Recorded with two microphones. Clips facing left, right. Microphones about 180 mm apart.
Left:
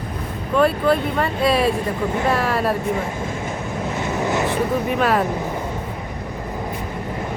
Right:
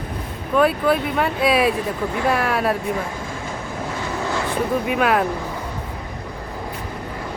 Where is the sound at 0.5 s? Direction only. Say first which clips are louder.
Even; 5° right (ahead or behind).